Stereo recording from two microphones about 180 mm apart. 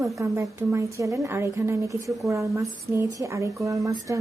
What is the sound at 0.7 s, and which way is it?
Speech, 15° right (ahead or behind).